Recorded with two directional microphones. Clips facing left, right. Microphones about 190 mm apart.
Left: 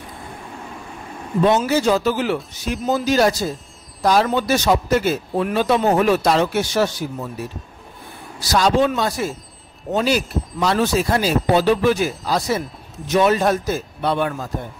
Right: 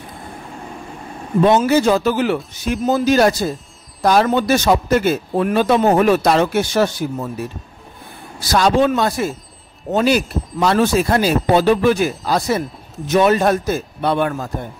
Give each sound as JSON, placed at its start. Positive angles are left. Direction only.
{"t": 1.4, "sound": "a man's voice", "side_deg": -55}
{"t": 8.4, "sound": "a man's voice", "side_deg": -55}